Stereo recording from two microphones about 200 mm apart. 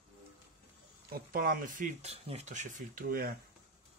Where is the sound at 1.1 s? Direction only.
45° right (ahead or behind).